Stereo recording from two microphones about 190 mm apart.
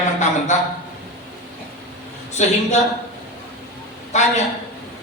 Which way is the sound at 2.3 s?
35° left (ahead or behind).